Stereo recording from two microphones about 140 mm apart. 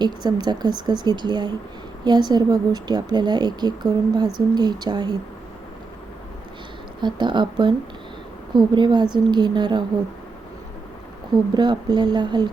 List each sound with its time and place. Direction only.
0.0 s a woman's voice: 30° right (ahead or behind)
7.0 s a woman's voice: 35° right (ahead or behind)
11.5 s a woman's voice: 30° right (ahead or behind)